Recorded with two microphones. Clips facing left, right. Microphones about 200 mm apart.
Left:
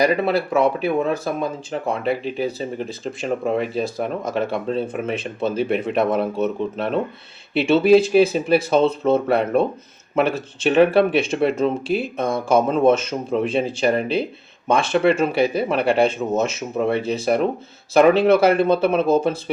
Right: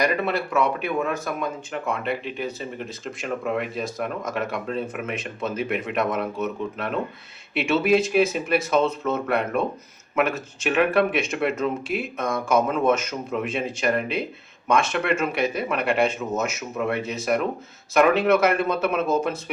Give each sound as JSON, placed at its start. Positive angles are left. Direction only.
{"t": 0.0, "sound": "speech", "side_deg": 30}